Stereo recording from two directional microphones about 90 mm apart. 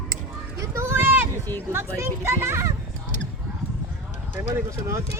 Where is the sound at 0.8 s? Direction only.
25° right (ahead or behind).